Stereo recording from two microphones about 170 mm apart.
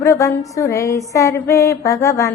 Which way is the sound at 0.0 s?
15° left (ahead or behind).